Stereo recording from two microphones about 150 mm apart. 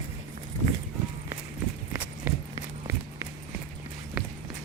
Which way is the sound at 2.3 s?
10° right (ahead or behind).